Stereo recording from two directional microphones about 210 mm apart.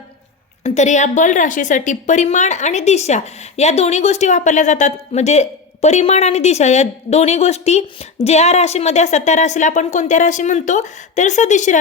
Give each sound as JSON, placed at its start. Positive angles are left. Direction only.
{"t": 0.6, "sound": "a woman's voice", "side_deg": 35}